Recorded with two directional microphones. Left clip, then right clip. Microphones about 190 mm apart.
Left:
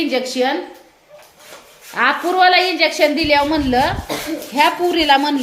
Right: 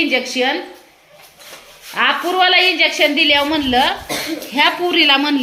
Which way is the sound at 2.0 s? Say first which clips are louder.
Even; 5° left (ahead or behind).